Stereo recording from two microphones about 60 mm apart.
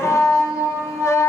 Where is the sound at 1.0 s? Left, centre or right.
Left.